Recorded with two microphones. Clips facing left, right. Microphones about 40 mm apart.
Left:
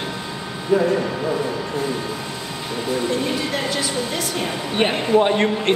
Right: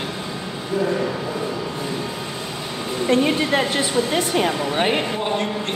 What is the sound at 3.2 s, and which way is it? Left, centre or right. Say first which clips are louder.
Speech: right 4 dB; right.